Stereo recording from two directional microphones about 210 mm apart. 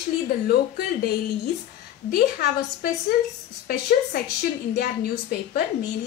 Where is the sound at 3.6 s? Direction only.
50° left (ahead or behind).